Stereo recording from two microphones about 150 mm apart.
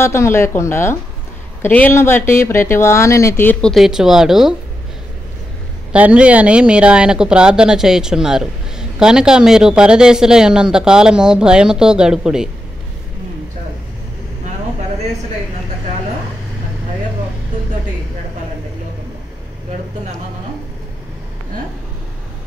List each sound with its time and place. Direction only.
0.0 s speech: 20° left (ahead or behind)
3.7 s a woman's voice: centre (ahead or behind)
5.9 s a woman's voice: 10° right (ahead or behind)